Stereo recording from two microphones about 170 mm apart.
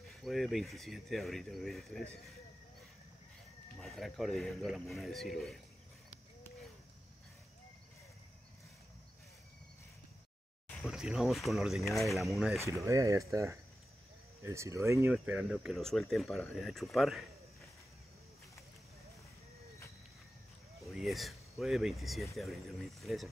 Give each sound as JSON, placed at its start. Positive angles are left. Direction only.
{"t": 0.1, "sound": "speech", "side_deg": 0}
{"t": 3.8, "sound": "speech", "side_deg": 0}
{"t": 10.8, "sound": "speech", "side_deg": -5}
{"t": 12.8, "sound": "speech", "side_deg": -20}
{"t": 15.1, "sound": "speech", "side_deg": -5}
{"t": 20.8, "sound": "speech", "side_deg": 0}